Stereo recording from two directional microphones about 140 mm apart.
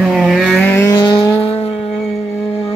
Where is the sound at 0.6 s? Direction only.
20° left (ahead or behind).